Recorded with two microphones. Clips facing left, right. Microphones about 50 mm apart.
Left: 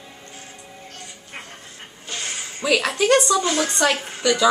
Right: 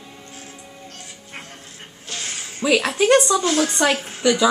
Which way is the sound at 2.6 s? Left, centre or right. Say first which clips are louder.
Right 2 dB; centre.